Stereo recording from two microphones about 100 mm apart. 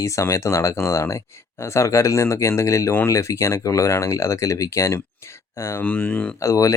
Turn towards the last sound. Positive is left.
turn(degrees=35)  # may be behind; listen again after turning